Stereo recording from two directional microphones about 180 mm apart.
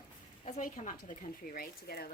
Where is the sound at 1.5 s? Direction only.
55° left (ahead or behind).